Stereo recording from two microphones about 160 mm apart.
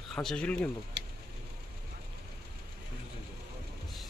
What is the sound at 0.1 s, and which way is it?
Speech, 5° left (ahead or behind).